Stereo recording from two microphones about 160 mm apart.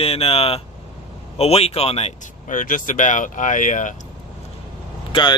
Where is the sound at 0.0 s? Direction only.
40° left (ahead or behind).